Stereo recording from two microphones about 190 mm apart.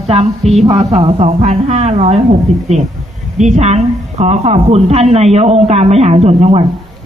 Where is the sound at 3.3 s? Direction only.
40° right (ahead or behind).